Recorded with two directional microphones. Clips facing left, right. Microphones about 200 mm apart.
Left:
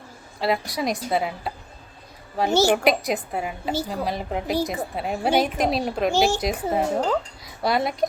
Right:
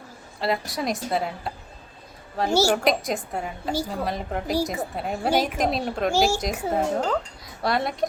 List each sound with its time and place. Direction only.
0.3 s a woman's voice: centre (ahead or behind)
2.5 s speech: 10° right (ahead or behind)
2.7 s a woman's voice: 5° left (ahead or behind)
6.1 s speech: 10° right (ahead or behind)
6.4 s a woman's voice: centre (ahead or behind)